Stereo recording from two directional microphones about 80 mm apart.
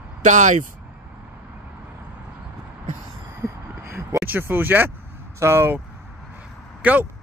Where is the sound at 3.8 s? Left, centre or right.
Right.